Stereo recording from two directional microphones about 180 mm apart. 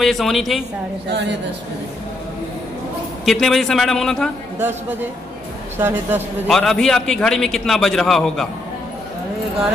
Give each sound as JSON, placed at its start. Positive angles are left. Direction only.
{"t": 0.0, "sound": "a man's voice", "side_deg": 0}
{"t": 3.3, "sound": "a man's voice", "side_deg": 0}
{"t": 5.8, "sound": "a man's voice", "side_deg": -10}
{"t": 6.4, "sound": "a man's voice", "side_deg": 0}